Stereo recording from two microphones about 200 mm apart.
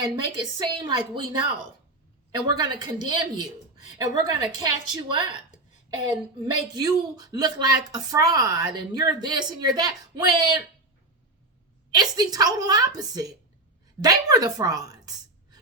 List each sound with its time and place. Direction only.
0.0 s speech: 20° right (ahead or behind)
2.3 s speech: 20° right (ahead or behind)
6.4 s speech: 20° right (ahead or behind)
11.9 s speech: 20° right (ahead or behind)